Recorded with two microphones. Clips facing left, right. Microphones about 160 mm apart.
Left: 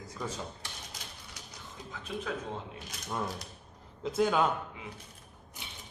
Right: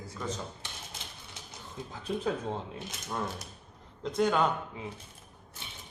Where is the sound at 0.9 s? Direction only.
25° right (ahead or behind).